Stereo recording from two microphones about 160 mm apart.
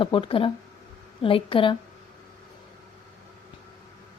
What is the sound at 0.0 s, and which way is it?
A woman's voice, 30° left (ahead or behind).